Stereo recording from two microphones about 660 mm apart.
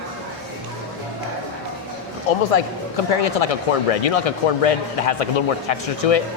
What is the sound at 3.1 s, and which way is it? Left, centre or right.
Speech, left.